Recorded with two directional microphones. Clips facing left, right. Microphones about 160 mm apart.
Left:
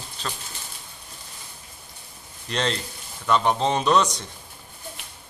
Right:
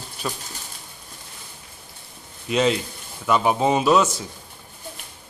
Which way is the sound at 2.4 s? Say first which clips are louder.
Right 6 dB; 5° right (ahead or behind).